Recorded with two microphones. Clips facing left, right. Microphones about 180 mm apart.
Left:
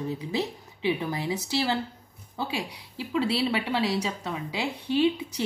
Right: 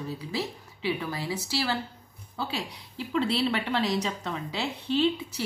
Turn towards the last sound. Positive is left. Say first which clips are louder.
# left 2 dB
turn(degrees=15)  # may be behind; listen again after turning